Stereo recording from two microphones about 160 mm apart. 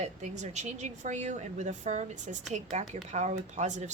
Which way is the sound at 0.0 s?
45° right (ahead or behind).